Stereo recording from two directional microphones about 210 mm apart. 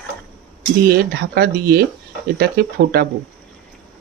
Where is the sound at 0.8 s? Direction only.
50° right (ahead or behind).